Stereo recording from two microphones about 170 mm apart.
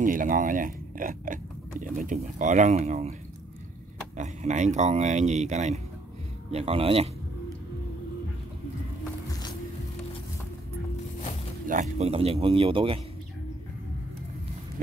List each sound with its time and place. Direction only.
0.0 s speech: 55° right (ahead or behind)
4.2 s a man's voice: 45° right (ahead or behind)
11.6 s a man's voice: 50° right (ahead or behind); by 13.0 s 30° right (ahead or behind)